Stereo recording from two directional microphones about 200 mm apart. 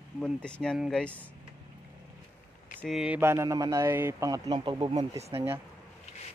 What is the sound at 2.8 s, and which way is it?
Speech, centre (ahead or behind).